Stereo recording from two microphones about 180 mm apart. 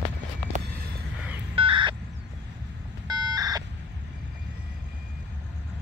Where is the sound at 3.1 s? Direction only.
20° right (ahead or behind).